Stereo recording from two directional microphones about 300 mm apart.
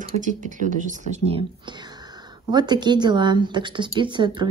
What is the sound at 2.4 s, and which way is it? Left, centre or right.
Speech, centre.